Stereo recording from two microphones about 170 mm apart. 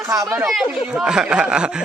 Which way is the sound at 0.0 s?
20° right (ahead or behind).